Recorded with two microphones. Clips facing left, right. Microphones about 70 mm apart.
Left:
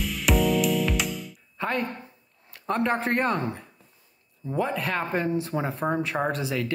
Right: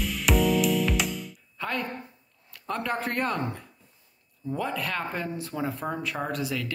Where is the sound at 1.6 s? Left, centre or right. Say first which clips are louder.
Left 4 dB; left.